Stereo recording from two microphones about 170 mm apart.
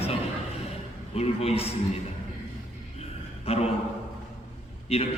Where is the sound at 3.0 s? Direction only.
35° left (ahead or behind).